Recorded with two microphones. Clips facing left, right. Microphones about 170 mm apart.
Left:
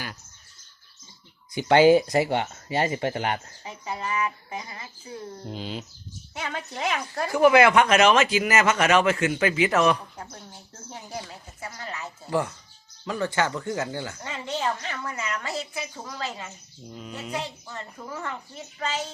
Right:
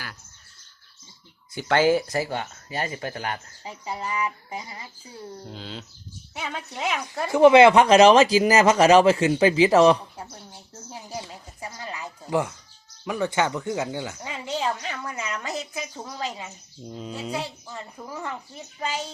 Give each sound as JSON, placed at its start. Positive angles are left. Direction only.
{"t": 1.5, "sound": "speech", "side_deg": 20}
{"t": 3.8, "sound": "speech", "side_deg": -15}
{"t": 5.5, "sound": "speech", "side_deg": 15}
{"t": 6.3, "sound": "speech", "side_deg": -5}
{"t": 7.3, "sound": "speech", "side_deg": -25}
{"t": 10.0, "sound": "speech", "side_deg": -10}
{"t": 16.9, "sound": "speech", "side_deg": -30}
{"t": 17.3, "sound": "speech", "side_deg": -10}